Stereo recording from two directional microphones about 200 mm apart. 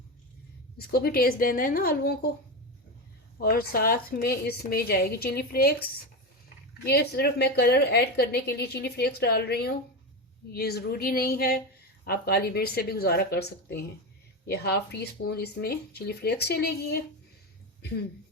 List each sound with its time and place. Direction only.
0.9 s a woman's voice: 50° left (ahead or behind)
3.3 s a woman's voice: 50° left (ahead or behind)
6.8 s a woman's voice: 55° left (ahead or behind)